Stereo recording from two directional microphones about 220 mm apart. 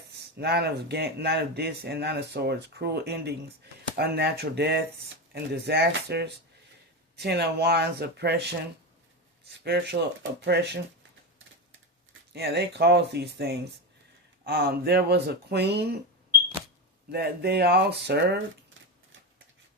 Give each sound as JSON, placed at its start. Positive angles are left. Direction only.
{"t": 0.1, "sound": "speech", "side_deg": -50}
{"t": 9.6, "sound": "speech", "side_deg": -50}
{"t": 12.3, "sound": "speech", "side_deg": -50}
{"t": 17.1, "sound": "speech", "side_deg": -45}